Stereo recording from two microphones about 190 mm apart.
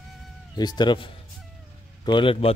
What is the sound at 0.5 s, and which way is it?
A man's voice, 20° left (ahead or behind).